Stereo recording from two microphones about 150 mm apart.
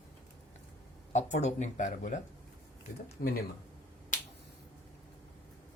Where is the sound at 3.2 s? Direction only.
70° left (ahead or behind).